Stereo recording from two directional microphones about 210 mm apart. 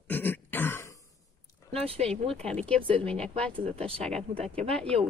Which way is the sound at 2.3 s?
5° left (ahead or behind).